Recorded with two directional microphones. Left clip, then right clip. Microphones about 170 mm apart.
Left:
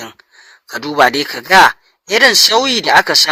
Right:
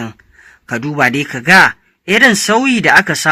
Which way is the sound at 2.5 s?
35° left (ahead or behind).